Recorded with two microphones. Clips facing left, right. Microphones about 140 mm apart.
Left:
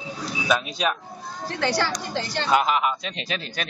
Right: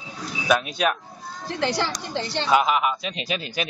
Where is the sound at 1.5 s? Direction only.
20° right (ahead or behind).